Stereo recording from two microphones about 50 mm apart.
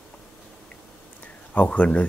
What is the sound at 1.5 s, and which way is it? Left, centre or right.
Speech, left.